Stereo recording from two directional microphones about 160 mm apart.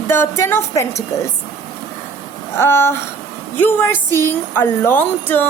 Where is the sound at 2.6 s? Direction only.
15° left (ahead or behind).